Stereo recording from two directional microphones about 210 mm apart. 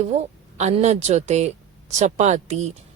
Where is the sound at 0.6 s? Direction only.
30° right (ahead or behind).